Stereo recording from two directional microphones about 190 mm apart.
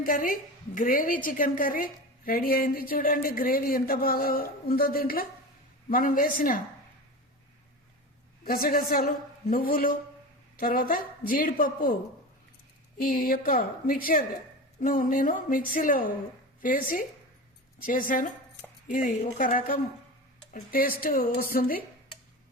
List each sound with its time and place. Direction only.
0.0 s a woman's voice: 45° left (ahead or behind)
8.4 s a woman's voice: 50° left (ahead or behind)
13.0 s a woman's voice: 50° left (ahead or behind)